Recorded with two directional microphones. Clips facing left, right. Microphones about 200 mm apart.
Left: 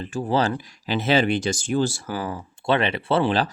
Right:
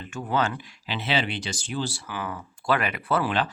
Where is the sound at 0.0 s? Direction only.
30° left (ahead or behind).